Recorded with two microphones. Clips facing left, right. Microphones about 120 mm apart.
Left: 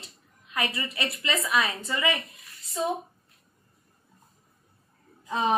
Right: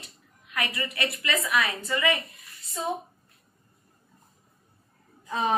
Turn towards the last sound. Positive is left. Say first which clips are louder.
# left 1 dB
turn(degrees=20)  # may be behind; listen again after turning